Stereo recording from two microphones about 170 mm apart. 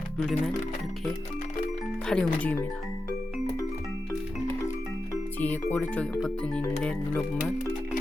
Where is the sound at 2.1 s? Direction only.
5° left (ahead or behind).